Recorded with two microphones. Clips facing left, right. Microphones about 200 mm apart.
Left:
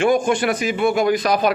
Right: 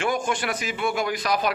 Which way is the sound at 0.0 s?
15° left (ahead or behind).